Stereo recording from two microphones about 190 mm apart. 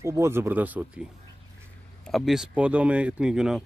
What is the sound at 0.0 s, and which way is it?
Speech, 15° right (ahead or behind).